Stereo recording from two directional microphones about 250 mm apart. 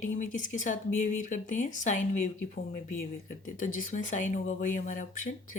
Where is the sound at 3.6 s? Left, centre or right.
Left.